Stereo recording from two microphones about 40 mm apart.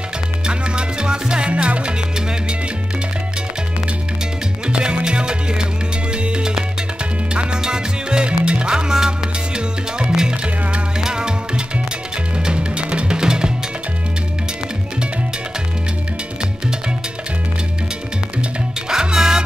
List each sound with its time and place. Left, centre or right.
0.5 s music: right
1.5 s music: right
4.6 s music: right
18.9 s music: centre